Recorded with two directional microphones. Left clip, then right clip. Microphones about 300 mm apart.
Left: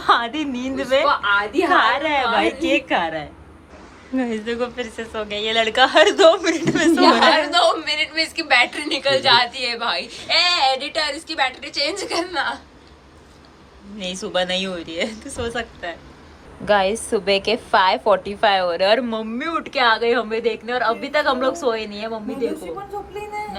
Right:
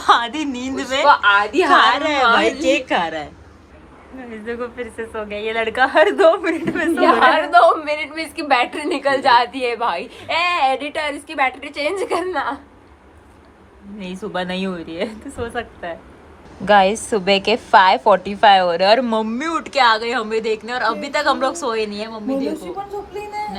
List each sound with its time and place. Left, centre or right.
0.0 s a woman's voice: centre
1.0 s a woman's voice: right
1.7 s a woman's voice: centre
4.4 s a woman's voice: centre
7.3 s a woman's voice: centre
14.0 s a woman's voice: centre